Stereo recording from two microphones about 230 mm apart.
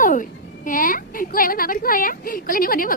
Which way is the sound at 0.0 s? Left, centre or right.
Left.